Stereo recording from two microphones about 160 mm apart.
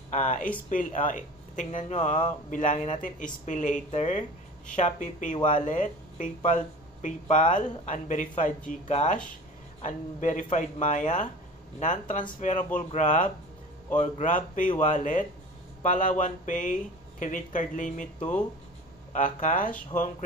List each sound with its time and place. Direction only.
0.1 s speech: 50° left (ahead or behind)